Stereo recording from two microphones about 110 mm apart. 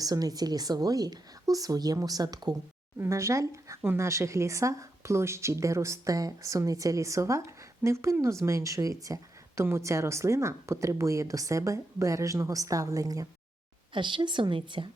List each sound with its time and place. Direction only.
0.0 s speech: 35° right (ahead or behind)
3.0 s a woman's voice: 25° right (ahead or behind)
13.9 s a woman's voice: 45° right (ahead or behind)